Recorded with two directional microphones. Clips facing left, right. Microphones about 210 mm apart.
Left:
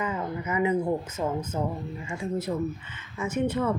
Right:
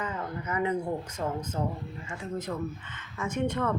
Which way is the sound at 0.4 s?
10° left (ahead or behind).